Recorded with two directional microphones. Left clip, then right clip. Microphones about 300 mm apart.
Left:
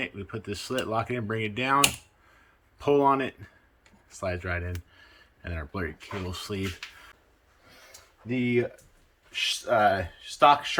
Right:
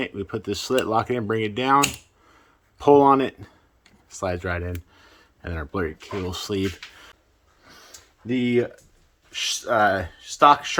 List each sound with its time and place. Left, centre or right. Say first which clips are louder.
0.0 s speech: right 6 dB; centre
8.3 s speech: right 4 dB; right